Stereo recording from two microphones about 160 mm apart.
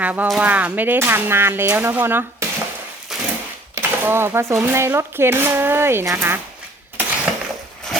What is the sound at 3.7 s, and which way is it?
Speech, 15° right (ahead or behind).